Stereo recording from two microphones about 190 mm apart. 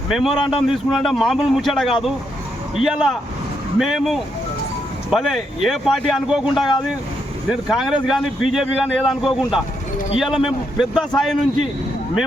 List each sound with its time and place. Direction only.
0.1 s speech: centre (ahead or behind)
0.3 s speech: 25° left (ahead or behind)
0.7 s speech: centre (ahead or behind)